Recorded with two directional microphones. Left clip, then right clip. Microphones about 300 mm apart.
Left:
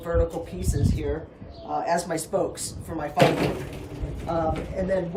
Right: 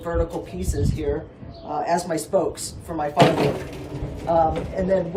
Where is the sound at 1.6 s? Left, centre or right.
Centre.